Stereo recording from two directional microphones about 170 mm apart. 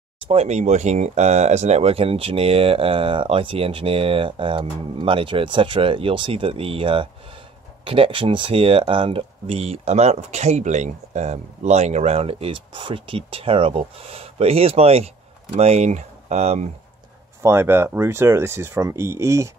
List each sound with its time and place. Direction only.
0.3 s speech: 40° right (ahead or behind)
17.4 s speech: 15° right (ahead or behind)